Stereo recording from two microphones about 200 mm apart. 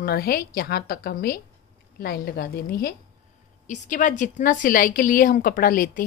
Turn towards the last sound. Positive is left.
turn(degrees=45)  # may be behind; listen again after turning